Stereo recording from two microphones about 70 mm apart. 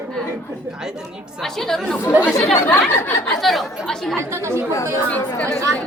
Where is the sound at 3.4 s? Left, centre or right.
Centre.